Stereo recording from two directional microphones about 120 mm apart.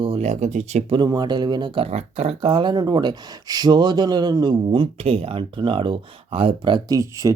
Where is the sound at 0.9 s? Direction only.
35° right (ahead or behind).